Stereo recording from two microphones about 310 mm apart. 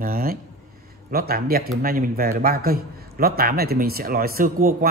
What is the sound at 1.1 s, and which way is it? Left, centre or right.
A man's voice, right.